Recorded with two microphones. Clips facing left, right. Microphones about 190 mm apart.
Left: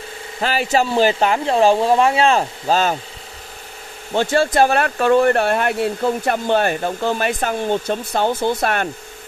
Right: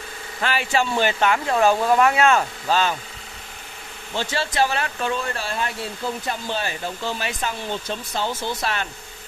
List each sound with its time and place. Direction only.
0.4 s speech: 40° left (ahead or behind)
4.1 s speech: 55° left (ahead or behind)